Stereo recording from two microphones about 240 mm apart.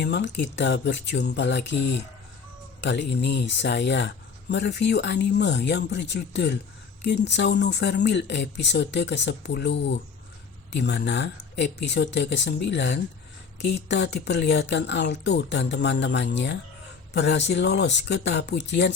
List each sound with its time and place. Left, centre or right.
0.0 s speech: left